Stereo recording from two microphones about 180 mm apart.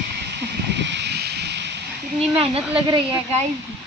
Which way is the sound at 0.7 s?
75° right (ahead or behind).